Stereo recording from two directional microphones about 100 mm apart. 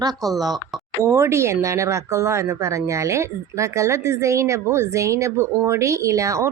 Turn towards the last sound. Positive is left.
turn(degrees=-30)  # may be behind; listen again after turning